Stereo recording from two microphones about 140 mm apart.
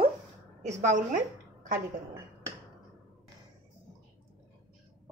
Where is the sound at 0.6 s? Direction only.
60° right (ahead or behind).